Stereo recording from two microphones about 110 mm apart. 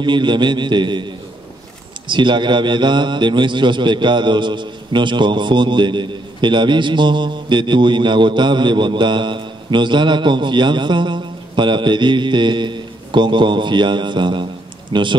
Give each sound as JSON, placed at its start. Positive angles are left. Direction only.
{"t": 0.0, "sound": "speech", "side_deg": -45}
{"t": 2.0, "sound": "speech", "side_deg": -45}